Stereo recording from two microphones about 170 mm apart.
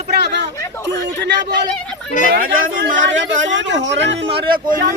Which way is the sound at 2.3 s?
60° right (ahead or behind).